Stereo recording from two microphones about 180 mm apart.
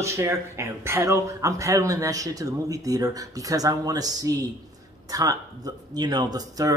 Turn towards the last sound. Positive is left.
turn(degrees=-20)  # may be behind; listen again after turning